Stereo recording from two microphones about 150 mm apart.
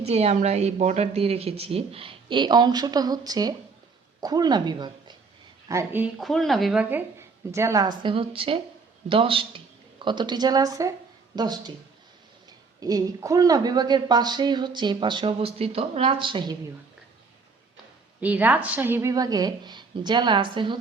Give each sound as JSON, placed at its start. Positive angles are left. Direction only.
{"t": 0.0, "sound": "speech", "side_deg": -45}
{"t": 5.6, "sound": "speech", "side_deg": -15}
{"t": 6.1, "sound": "speech", "side_deg": 0}
{"t": 6.9, "sound": "speech", "side_deg": -20}
{"t": 12.8, "sound": "speech", "side_deg": -25}
{"t": 18.2, "sound": "speech", "side_deg": -10}